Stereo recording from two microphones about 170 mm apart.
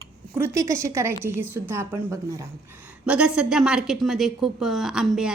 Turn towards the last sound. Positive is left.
turn(degrees=0)  # may be behind; listen again after turning